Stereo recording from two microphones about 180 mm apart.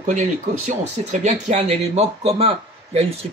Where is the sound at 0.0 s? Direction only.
40° right (ahead or behind).